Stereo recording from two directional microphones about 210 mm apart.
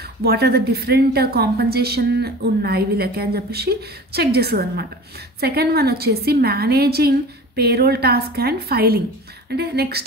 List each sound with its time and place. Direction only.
0.0 s a woman's voice: 50° right (ahead or behind)